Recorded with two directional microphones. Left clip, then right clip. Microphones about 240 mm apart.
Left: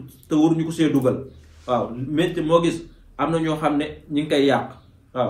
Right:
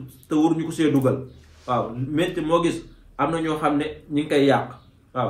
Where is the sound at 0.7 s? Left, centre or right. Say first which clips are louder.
Left 1 dB; centre.